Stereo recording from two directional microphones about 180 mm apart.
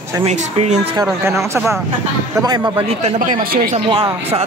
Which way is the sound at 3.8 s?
25° right (ahead or behind).